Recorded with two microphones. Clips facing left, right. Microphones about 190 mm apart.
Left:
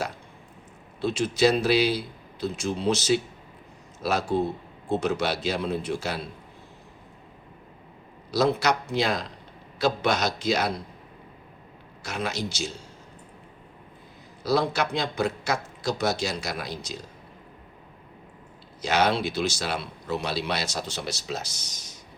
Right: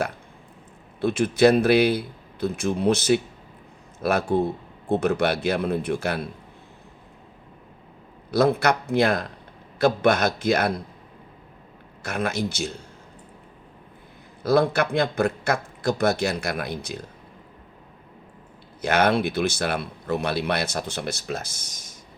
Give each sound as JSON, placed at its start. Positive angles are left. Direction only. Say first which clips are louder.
{"t": 1.0, "sound": "a man's voice", "louder": "right 4 dB", "side_deg": -55}
{"t": 8.3, "sound": "a man's voice", "louder": "right 3 dB", "side_deg": -55}
{"t": 12.0, "sound": "a man's voice", "louder": "right 4 dB", "side_deg": -55}
{"t": 14.4, "sound": "a man's voice", "louder": "right 4 dB", "side_deg": -55}
{"t": 18.8, "sound": "a man's voice", "louder": "right 3 dB", "side_deg": -55}